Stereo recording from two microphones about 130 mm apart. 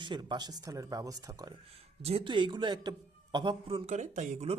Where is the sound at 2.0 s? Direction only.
55° right (ahead or behind).